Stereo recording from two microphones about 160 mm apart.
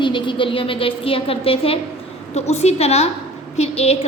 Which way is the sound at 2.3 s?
45° left (ahead or behind).